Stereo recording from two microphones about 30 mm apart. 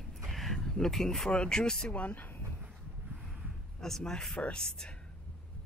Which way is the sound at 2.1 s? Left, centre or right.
Left.